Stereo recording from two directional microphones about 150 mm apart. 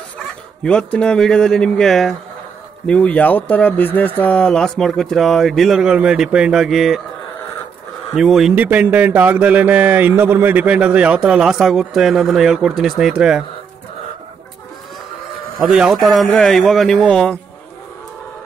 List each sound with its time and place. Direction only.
0.7 s speech: 5° left (ahead or behind)
8.2 s speech: centre (ahead or behind)
15.6 s speech: 5° right (ahead or behind)